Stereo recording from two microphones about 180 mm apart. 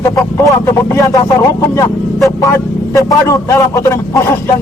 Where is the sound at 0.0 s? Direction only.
15° left (ahead or behind).